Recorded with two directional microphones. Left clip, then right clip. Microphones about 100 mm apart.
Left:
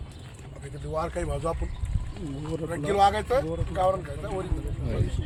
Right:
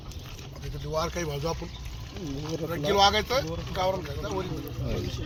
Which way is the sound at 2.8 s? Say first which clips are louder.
Even; 20° left (ahead or behind).